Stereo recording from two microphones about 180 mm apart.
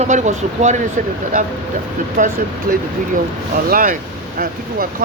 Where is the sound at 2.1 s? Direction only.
45° right (ahead or behind).